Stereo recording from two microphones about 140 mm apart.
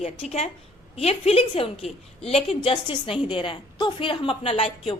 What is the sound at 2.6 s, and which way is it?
Female singing, 40° left (ahead or behind).